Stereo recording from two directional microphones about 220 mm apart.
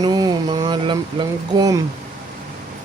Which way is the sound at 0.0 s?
20° right (ahead or behind).